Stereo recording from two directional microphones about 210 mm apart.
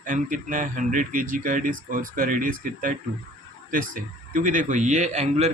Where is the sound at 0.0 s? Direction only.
40° right (ahead or behind).